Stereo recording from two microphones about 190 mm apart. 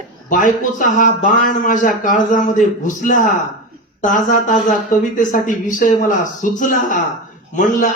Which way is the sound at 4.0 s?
45° left (ahead or behind).